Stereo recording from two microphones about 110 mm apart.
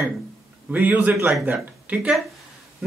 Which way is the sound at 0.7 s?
15° right (ahead or behind).